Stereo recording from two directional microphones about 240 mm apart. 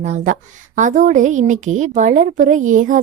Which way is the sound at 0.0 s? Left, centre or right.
Right.